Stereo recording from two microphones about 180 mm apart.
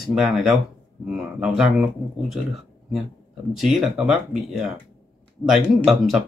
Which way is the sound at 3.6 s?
Centre (ahead or behind).